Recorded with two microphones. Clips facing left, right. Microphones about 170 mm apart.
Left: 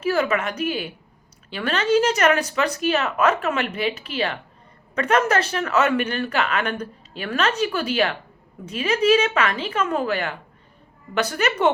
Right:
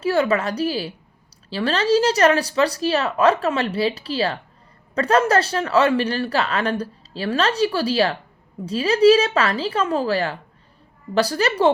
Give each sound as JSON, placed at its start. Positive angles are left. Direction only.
{"t": 0.0, "sound": "speech", "side_deg": -30}